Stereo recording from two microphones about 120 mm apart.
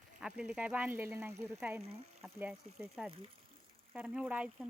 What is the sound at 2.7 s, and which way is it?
Speech, 70° right (ahead or behind).